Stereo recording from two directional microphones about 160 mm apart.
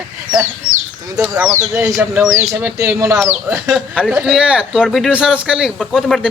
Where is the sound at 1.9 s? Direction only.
5° right (ahead or behind).